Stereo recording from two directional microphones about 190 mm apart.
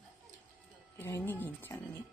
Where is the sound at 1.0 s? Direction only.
10° left (ahead or behind).